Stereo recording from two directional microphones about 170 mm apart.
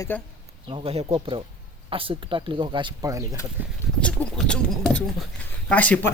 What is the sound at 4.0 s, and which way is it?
Speech, 5° left (ahead or behind).